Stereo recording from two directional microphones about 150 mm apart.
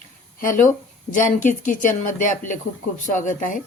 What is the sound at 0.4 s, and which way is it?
Speech, 60° left (ahead or behind).